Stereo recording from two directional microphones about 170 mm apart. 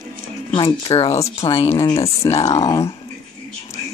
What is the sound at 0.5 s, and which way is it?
Speech, 30° left (ahead or behind).